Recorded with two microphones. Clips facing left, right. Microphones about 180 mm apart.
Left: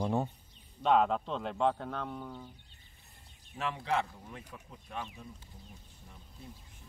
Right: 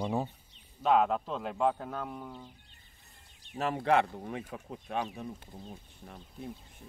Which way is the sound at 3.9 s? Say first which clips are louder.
Right 8 dB; 60° right (ahead or behind).